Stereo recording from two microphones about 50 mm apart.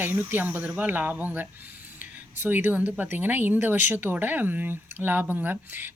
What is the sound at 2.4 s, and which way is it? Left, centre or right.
Speech, right.